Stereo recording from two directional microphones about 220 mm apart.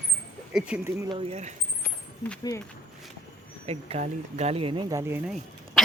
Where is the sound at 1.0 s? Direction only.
25° right (ahead or behind).